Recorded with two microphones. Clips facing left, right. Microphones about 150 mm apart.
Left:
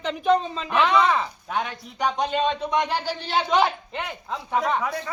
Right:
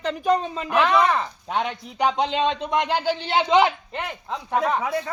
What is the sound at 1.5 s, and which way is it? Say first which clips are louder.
A man's voice: right 4 dB; 25° right (ahead or behind).